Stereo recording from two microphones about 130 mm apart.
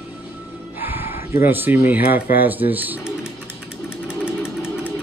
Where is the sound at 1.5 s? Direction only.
15° right (ahead or behind).